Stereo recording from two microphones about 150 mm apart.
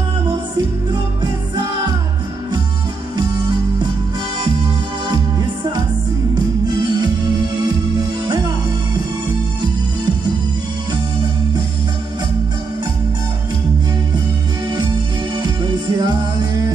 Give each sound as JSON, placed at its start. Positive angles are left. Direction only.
{"t": 1.2, "sound": "music", "side_deg": -30}
{"t": 3.2, "sound": "music", "side_deg": -30}
{"t": 5.1, "sound": "music", "side_deg": -25}
{"t": 15.4, "sound": "music", "side_deg": -30}